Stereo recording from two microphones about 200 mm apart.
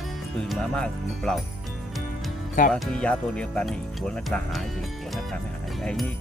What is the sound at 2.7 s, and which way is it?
Speech, 5° left (ahead or behind).